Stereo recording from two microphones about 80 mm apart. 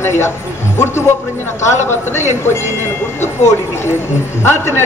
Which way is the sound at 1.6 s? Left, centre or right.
Left.